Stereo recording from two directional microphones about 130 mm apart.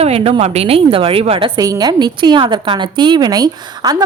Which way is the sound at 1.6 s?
30° right (ahead or behind).